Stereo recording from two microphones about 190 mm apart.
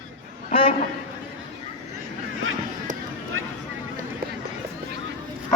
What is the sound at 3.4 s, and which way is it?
Vehicle, 90° right.